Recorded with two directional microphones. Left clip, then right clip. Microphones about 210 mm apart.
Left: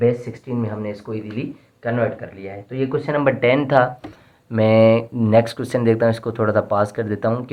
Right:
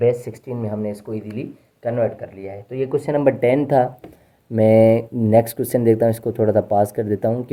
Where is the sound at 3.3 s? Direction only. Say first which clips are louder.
Even; 55° right (ahead or behind).